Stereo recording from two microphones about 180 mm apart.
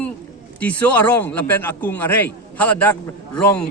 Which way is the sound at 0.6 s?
10° left (ahead or behind).